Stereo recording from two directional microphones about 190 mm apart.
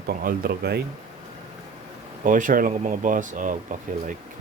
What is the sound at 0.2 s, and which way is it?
Speech, 50° right (ahead or behind).